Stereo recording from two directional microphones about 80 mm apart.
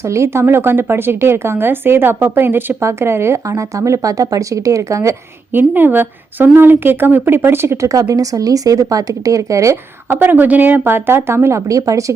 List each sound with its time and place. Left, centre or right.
0.1 s a woman's voice: right
5.5 s a woman's voice: right
10.1 s a woman's voice: right